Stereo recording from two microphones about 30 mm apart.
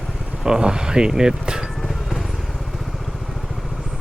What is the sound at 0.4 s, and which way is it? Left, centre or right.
Speech, right.